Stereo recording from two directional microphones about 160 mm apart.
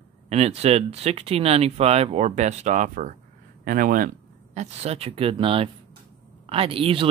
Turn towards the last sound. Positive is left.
turn(degrees=-35)  # may be behind; listen again after turning